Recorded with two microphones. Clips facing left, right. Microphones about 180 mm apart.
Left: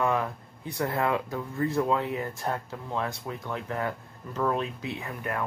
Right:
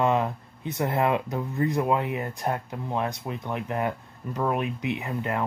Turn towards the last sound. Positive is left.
turn(degrees=-20)  # may be behind; listen again after turning